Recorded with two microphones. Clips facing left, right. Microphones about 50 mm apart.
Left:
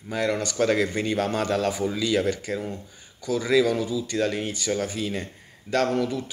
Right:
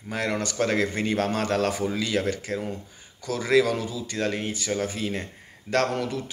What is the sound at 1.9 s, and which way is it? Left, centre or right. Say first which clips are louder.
Speech: left 2 dB; right.